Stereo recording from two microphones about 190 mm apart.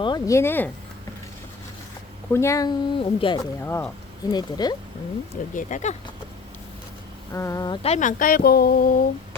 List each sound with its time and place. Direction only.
0.0 s speech: 20° left (ahead or behind)
2.3 s speech: 15° left (ahead or behind)
3.7 s speech: 10° left (ahead or behind)
4.3 s speech: 20° left (ahead or behind)
5.3 s speech: 40° left (ahead or behind)
7.3 s speech: 15° left (ahead or behind)
7.8 s speech: 35° left (ahead or behind)